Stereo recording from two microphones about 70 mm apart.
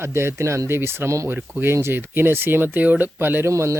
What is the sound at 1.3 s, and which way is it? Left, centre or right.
Speech, right.